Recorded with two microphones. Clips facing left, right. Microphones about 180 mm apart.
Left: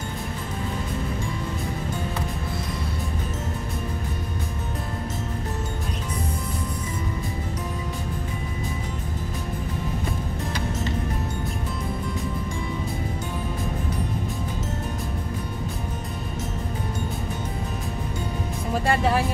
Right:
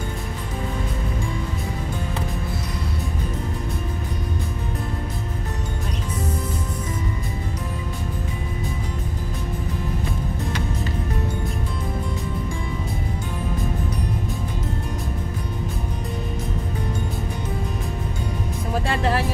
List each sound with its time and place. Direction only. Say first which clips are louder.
18.7 s music: left 1 dB; centre (ahead or behind)